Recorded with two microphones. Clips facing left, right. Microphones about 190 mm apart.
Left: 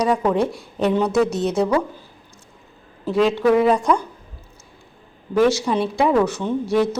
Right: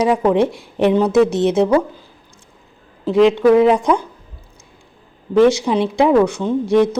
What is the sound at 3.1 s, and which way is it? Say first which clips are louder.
Speech: right 5 dB; 20° right (ahead or behind).